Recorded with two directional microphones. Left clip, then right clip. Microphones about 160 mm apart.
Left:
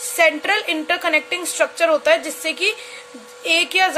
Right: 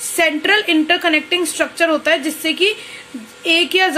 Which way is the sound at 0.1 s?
20° left (ahead or behind).